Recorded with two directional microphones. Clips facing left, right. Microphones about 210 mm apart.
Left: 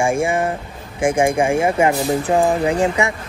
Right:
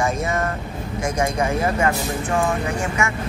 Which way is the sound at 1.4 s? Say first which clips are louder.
Left 5 dB; 30° left (ahead or behind).